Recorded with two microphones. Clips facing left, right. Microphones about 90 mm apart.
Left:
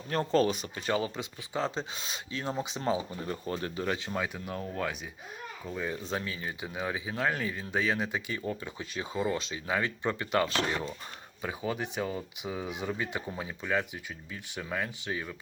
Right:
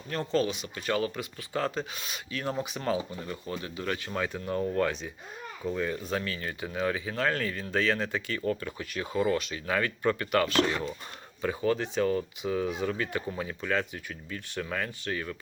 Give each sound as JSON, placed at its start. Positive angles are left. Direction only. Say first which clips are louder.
{"t": 0.1, "sound": "speech", "louder": "left 2 dB", "side_deg": 40}
{"t": 0.9, "sound": "speech", "louder": "right 1 dB", "side_deg": 25}
{"t": 3.2, "sound": "speech", "louder": "left 2 dB", "side_deg": 35}
{"t": 3.8, "sound": "speech", "louder": "right 1 dB", "side_deg": 20}
{"t": 4.1, "sound": "speech", "louder": "right 3 dB", "side_deg": 5}
{"t": 6.0, "sound": "speech", "louder": "right 2 dB", "side_deg": 25}
{"t": 11.4, "sound": "speech", "louder": "right 6 dB", "side_deg": 10}